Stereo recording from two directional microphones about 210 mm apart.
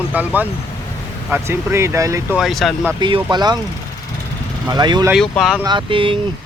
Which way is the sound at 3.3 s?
20° right (ahead or behind).